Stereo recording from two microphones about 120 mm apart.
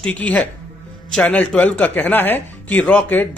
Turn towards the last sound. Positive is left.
turn(degrees=15)  # may be behind; listen again after turning